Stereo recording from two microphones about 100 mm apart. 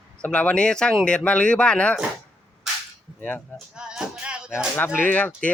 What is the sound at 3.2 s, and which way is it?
Speech, 15° left (ahead or behind).